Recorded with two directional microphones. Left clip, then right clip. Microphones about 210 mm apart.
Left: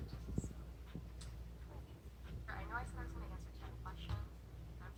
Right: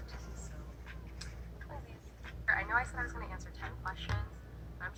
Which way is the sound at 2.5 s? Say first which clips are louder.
Right 15 dB; 20° right (ahead or behind).